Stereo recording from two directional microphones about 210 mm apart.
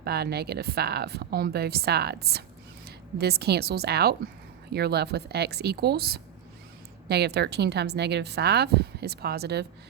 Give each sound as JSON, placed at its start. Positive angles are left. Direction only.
{"t": 0.0, "sound": "a woman's voice", "side_deg": -50}